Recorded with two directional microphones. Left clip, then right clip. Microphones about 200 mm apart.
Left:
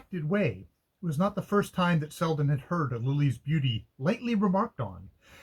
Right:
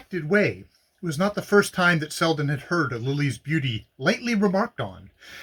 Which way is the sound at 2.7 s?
30° right (ahead or behind).